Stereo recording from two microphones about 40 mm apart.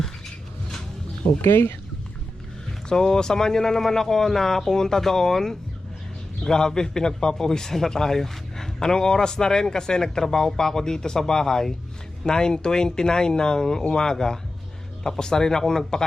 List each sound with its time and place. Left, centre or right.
1.5 s speech: left
2.9 s a man's voice: centre